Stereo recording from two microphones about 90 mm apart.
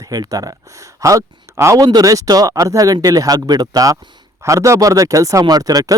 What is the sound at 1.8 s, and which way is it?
Speech, 45° right (ahead or behind).